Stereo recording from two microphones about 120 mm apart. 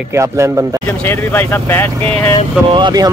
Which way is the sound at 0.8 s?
20° left (ahead or behind).